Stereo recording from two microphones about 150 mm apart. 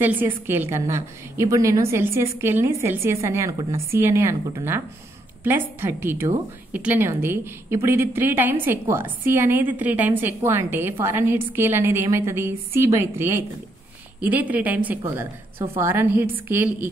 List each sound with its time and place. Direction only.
0.0 s a woman's voice: 15° right (ahead or behind)